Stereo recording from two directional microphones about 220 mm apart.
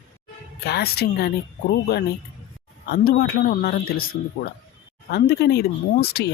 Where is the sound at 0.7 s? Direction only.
45° left (ahead or behind).